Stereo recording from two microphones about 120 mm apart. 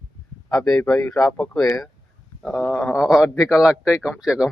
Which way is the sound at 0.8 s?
20° left (ahead or behind).